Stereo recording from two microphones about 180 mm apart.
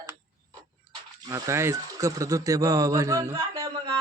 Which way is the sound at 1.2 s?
20° right (ahead or behind).